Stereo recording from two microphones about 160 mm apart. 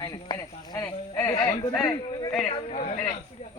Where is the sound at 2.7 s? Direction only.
40° left (ahead or behind).